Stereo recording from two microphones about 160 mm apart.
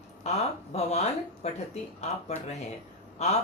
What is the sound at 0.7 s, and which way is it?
Speech, 40° left (ahead or behind).